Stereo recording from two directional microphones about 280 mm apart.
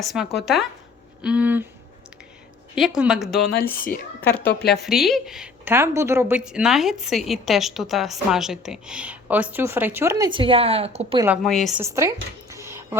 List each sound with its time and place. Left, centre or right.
0.0 s a woman's voice: centre
2.7 s a woman's voice: centre
3.5 s speech: left
4.2 s a woman's voice: centre
11.3 s a woman's voice: centre
11.8 s a sound: centre